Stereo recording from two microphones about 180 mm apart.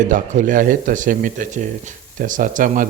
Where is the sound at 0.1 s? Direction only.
45° right (ahead or behind).